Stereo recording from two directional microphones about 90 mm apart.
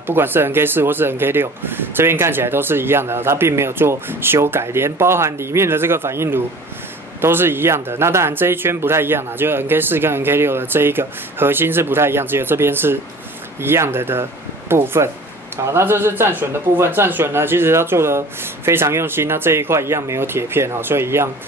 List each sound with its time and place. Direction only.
0.0 s speech: 25° right (ahead or behind)